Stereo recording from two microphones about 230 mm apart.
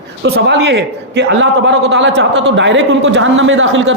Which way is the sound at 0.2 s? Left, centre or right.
Right.